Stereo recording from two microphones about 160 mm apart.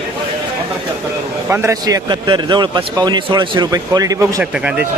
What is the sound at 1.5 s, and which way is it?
A man's voice, 15° right (ahead or behind).